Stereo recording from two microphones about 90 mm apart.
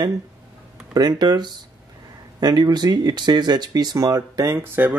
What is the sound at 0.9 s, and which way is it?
Speech, 50° right (ahead or behind).